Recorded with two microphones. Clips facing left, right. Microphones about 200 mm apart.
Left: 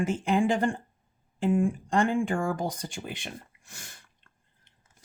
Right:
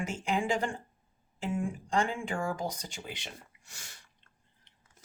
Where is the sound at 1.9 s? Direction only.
55° left (ahead or behind).